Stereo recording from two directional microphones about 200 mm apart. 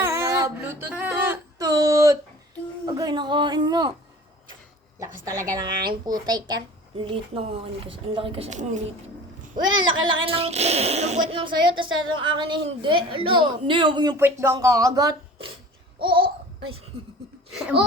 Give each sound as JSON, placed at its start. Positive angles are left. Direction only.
{"t": 0.0, "sound": "a sound", "side_deg": -15}
{"t": 2.8, "sound": "speech", "side_deg": -20}
{"t": 5.2, "sound": "a woman's voice", "side_deg": -15}
{"t": 9.7, "sound": "speech", "side_deg": -80}
{"t": 10.2, "sound": "a child's voice", "side_deg": -30}
{"t": 16.0, "sound": "babbling", "side_deg": -25}
{"t": 16.9, "sound": "laughter", "side_deg": -55}